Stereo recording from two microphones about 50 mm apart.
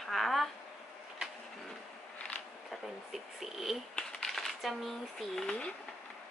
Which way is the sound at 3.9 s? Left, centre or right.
Centre.